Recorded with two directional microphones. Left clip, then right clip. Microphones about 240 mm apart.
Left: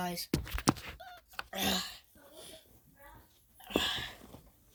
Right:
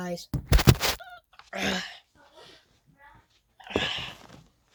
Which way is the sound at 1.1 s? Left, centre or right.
Centre.